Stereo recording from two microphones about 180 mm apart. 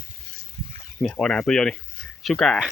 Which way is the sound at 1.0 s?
Centre (ahead or behind).